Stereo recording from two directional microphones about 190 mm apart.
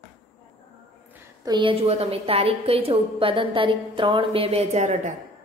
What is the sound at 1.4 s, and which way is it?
A woman's voice, 25° right (ahead or behind).